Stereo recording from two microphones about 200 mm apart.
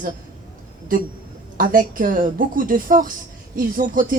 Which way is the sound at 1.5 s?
45° right (ahead or behind).